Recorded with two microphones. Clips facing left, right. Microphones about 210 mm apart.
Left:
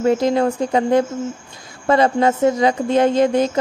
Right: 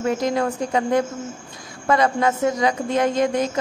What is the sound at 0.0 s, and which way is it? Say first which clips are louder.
A woman's voice: left 5 dB; 30° left (ahead or behind).